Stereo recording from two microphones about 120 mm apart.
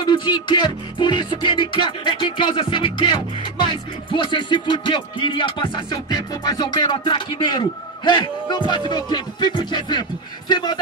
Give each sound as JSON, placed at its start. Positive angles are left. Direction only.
{"t": 0.0, "sound": "music", "side_deg": 40}